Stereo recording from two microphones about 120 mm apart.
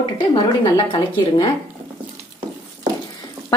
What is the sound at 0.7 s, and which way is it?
Speech, 40° left (ahead or behind).